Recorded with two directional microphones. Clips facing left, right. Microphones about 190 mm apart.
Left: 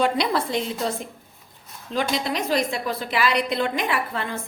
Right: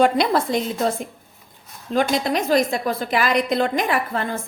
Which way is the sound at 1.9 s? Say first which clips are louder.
Right 5 dB; 50° right (ahead or behind).